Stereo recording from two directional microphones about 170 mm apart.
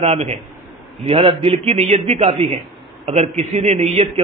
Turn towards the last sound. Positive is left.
turn(degrees=-35)  # may be behind; listen again after turning